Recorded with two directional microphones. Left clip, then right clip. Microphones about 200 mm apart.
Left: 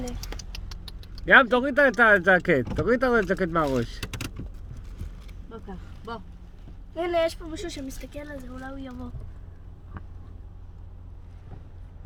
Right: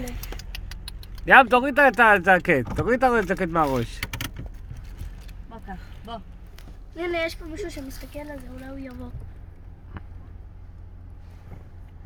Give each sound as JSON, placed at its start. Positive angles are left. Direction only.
{"t": 1.2, "sound": "speech", "side_deg": -20}
{"t": 6.9, "sound": "speech", "side_deg": 50}
{"t": 10.0, "sound": "vehicle", "side_deg": -10}